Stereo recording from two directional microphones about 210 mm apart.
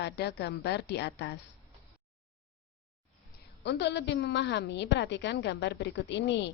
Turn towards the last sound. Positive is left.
turn(degrees=55)  # may be behind; listen again after turning